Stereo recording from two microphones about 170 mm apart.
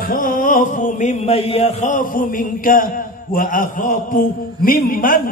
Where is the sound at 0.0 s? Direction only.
55° left (ahead or behind).